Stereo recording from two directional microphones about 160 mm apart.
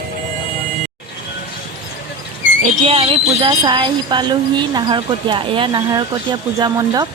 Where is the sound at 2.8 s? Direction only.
35° right (ahead or behind).